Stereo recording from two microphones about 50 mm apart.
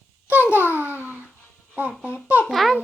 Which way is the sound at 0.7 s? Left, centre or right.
Right.